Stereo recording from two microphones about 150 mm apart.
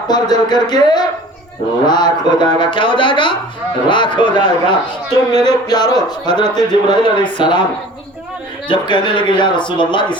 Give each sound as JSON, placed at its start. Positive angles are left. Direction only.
{"t": 0.1, "sound": "speech", "side_deg": 30}
{"t": 8.6, "sound": "speech", "side_deg": 30}